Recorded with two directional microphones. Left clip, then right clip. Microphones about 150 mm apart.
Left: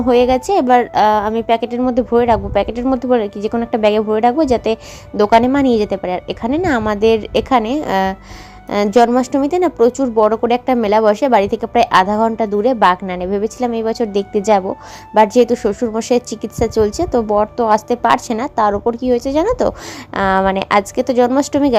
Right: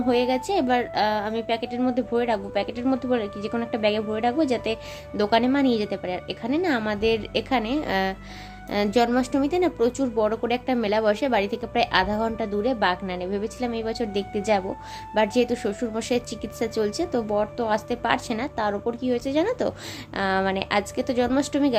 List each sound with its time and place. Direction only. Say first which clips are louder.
0.1 s a woman's voice: left 11 dB; 40° left (ahead or behind)